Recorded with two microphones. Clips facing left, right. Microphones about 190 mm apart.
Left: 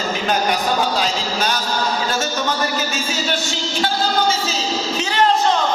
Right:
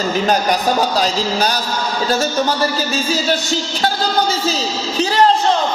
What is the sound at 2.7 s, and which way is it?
Speech, 35° right (ahead or behind).